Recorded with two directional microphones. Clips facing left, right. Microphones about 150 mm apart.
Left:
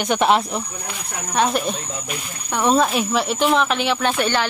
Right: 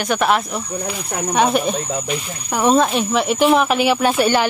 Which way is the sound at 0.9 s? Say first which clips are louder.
Right 7 dB; 5° right (ahead or behind).